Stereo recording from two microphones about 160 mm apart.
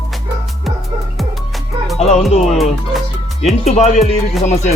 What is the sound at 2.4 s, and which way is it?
Music, centre (ahead or behind).